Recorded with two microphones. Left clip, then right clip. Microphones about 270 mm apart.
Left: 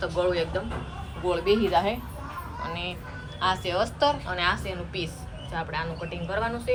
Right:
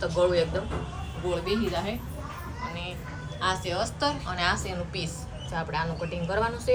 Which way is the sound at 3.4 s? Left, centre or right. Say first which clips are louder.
Left 3 dB; centre.